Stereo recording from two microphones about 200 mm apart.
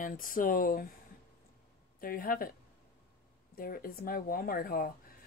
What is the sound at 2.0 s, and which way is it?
Speech, 45° left (ahead or behind).